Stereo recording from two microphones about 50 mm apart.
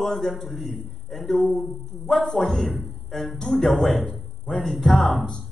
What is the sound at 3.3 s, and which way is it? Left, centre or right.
A man's voice, centre.